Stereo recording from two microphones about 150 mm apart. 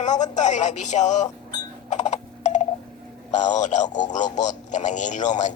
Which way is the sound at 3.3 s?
55° left (ahead or behind).